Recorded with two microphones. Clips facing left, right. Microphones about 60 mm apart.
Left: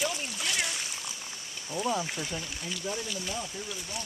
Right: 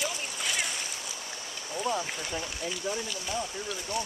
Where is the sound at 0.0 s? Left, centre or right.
Centre.